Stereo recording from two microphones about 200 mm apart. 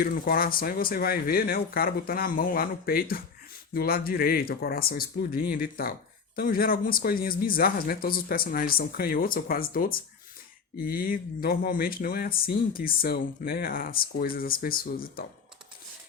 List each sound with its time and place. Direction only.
0.0 s speech: 45° left (ahead or behind)